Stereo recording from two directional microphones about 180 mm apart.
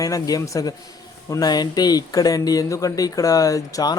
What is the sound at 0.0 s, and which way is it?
Speech, 20° left (ahead or behind).